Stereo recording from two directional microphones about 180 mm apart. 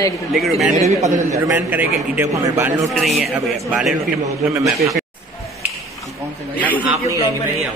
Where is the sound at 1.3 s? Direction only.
15° right (ahead or behind).